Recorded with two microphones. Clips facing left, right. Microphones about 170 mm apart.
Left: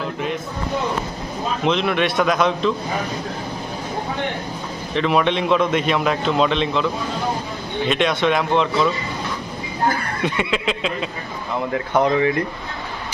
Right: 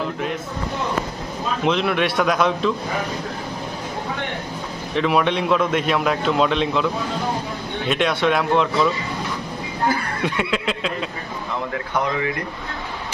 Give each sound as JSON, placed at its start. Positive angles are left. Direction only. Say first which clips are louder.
{"t": 1.6, "sound": "a man's voice", "louder": "even", "side_deg": -5}
{"t": 4.9, "sound": "a man's voice", "louder": "left 1 dB", "side_deg": -5}
{"t": 10.2, "sound": "a man's voice", "louder": "left 1 dB", "side_deg": 0}
{"t": 11.9, "sound": "speech", "louder": "left 6 dB", "side_deg": 25}